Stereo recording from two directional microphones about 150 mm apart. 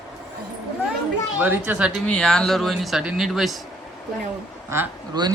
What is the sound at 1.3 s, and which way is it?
Speech, 10° right (ahead or behind).